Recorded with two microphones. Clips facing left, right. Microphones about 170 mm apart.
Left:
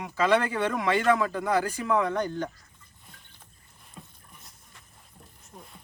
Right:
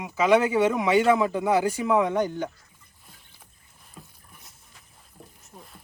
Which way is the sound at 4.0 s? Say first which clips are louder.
Even; centre (ahead or behind).